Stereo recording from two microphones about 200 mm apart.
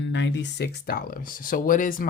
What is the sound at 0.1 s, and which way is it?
Speech, 65° left (ahead or behind).